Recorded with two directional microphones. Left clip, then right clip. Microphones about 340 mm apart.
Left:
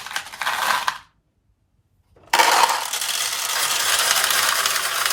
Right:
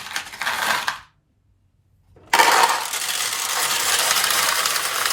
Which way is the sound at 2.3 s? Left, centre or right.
Centre.